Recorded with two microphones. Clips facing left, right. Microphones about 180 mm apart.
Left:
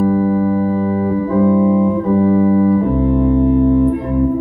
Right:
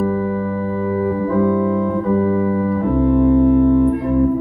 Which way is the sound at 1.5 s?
15° left (ahead or behind).